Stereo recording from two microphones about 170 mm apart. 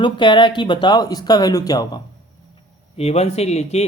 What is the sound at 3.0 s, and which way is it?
Speech, 35° left (ahead or behind).